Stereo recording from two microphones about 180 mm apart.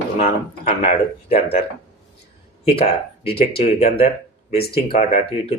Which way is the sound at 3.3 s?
30° left (ahead or behind).